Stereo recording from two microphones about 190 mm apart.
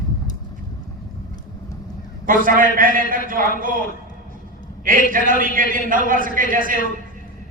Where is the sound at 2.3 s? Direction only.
45° right (ahead or behind).